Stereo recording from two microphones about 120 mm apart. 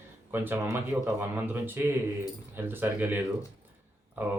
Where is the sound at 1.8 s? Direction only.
15° right (ahead or behind).